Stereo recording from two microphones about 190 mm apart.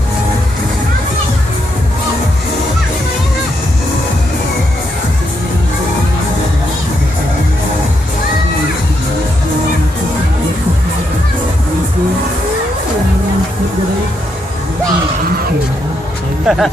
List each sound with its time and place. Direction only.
16.5 s speech: 5° right (ahead or behind)